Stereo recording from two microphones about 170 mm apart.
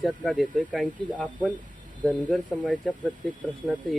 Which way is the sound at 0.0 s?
Centre (ahead or behind).